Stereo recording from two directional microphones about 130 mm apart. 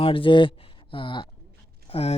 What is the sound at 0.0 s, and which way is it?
Speech, 40° left (ahead or behind).